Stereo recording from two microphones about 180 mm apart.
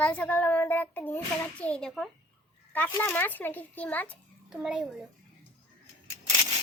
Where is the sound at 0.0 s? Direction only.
10° left (ahead or behind).